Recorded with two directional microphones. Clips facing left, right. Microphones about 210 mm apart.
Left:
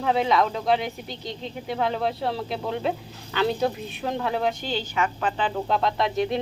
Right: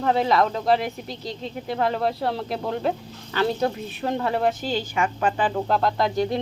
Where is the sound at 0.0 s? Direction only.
Centre (ahead or behind).